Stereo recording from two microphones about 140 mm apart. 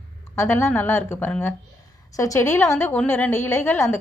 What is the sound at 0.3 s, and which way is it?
A woman's voice, 15° left (ahead or behind).